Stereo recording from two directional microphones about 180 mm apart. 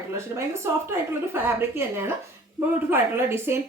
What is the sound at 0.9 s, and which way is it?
Speech, 15° right (ahead or behind).